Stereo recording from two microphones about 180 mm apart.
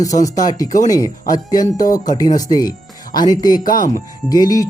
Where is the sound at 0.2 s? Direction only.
20° left (ahead or behind).